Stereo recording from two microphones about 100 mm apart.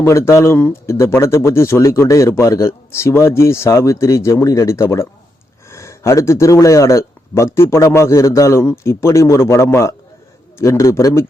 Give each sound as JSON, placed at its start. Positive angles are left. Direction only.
{"t": 0.0, "sound": "a man's voice", "side_deg": 30}